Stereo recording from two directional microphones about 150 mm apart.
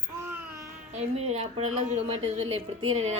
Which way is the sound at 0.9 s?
45° right (ahead or behind).